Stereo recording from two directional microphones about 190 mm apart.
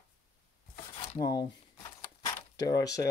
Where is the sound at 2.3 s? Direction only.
20° left (ahead or behind).